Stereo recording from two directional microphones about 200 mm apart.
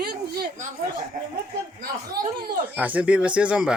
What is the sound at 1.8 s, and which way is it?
Speech, 45° right (ahead or behind).